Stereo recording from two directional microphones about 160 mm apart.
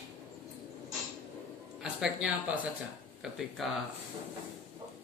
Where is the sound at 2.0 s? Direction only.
10° right (ahead or behind).